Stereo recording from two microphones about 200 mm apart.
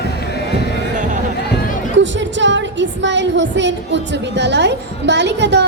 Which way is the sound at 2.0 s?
65° right (ahead or behind).